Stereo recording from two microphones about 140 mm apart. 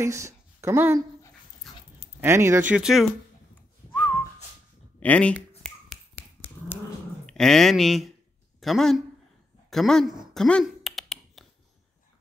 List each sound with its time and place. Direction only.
0.0 s a woman's voice: 20° right (ahead or behind)
1.6 s dog: centre (ahead or behind)
2.1 s speech: 20° right (ahead or behind); by 3.1 s 5° right (ahead or behind)
3.9 s whistling: 10° left (ahead or behind)
5.0 s speech: 10° left (ahead or behind)
7.2 s speech: 5° left (ahead or behind)
9.7 s a sound: centre (ahead or behind)